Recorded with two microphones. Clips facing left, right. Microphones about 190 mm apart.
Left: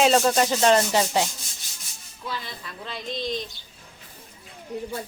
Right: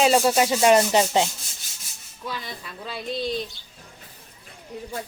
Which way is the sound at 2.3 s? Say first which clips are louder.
Right 1 dB; 10° right (ahead or behind).